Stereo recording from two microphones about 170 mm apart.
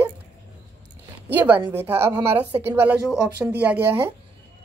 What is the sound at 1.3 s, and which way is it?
Speech, 10° right (ahead or behind).